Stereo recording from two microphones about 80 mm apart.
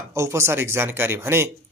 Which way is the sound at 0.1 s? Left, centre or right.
Right.